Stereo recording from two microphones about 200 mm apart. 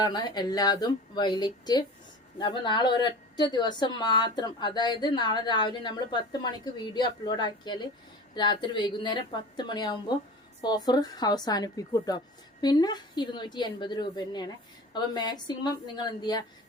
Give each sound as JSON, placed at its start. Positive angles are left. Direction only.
{"t": 0.0, "sound": "a woman's voice", "side_deg": 20}